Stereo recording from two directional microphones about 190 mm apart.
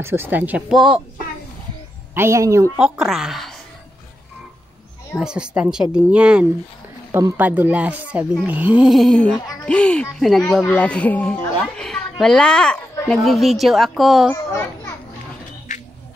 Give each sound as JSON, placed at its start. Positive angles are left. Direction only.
{"t": 0.0, "sound": "speech", "side_deg": -10}
{"t": 2.1, "sound": "speech", "side_deg": -15}
{"t": 2.8, "sound": "speech", "side_deg": -5}
{"t": 5.1, "sound": "a child's voice", "side_deg": -5}
{"t": 14.3, "sound": "a child's voice", "side_deg": 15}